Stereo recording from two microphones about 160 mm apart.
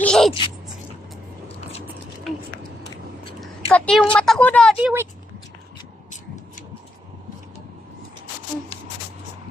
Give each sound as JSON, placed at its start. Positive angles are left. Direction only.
{"t": 0.0, "sound": "speech", "side_deg": 5}
{"t": 3.4, "sound": "speech", "side_deg": 5}
{"t": 4.8, "sound": "speech", "side_deg": -10}